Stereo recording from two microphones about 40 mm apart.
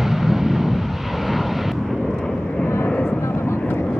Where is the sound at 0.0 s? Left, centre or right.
Centre.